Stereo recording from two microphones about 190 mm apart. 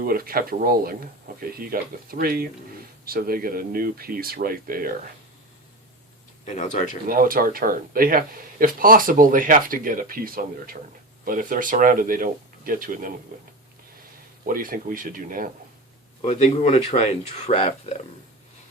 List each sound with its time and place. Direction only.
0.0 s speech: 50° right (ahead or behind)
6.4 s speech: 35° left (ahead or behind)
7.1 s speech: 50° right (ahead or behind)
14.4 s speech: 50° right (ahead or behind)
16.2 s speech: 35° left (ahead or behind)